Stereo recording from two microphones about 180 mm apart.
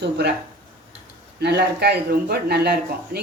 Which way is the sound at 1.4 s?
65° right (ahead or behind).